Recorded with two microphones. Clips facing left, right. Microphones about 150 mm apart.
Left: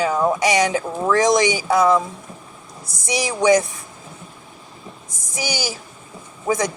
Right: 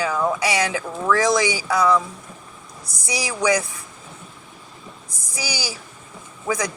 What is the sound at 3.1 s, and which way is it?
Speech, 20° left (ahead or behind).